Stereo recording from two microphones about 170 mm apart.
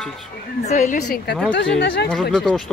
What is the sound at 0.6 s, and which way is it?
Speech, 45° left (ahead or behind).